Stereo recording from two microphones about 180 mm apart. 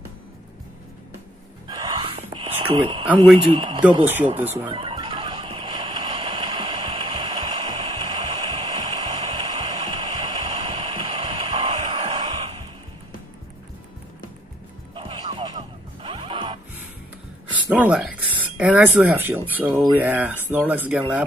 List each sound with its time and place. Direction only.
1.7 s whispering: 20° right (ahead or behind)
2.6 s a man's voice: 30° right (ahead or behind)
4.0 s speech: 10° right (ahead or behind)
4.6 s neigh: 25° right (ahead or behind)
9.8 s a sound: 20° right (ahead or behind)
15.0 s music: 25° right (ahead or behind)
17.5 s a sound: 10° right (ahead or behind)
18.6 s speech: 5° right (ahead or behind)